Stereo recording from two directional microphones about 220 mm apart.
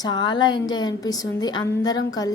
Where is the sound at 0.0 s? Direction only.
20° left (ahead or behind).